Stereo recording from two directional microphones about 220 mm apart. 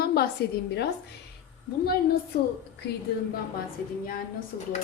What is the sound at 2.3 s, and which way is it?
Speech, 40° left (ahead or behind).